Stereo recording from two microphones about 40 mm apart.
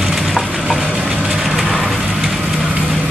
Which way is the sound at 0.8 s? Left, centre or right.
Right.